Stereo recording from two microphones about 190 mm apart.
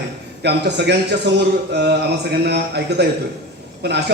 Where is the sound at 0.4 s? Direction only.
60° right (ahead or behind).